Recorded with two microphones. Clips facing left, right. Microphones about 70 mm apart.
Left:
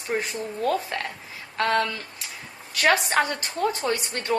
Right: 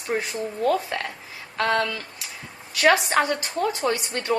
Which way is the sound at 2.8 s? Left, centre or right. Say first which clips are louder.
Right 2 dB; right.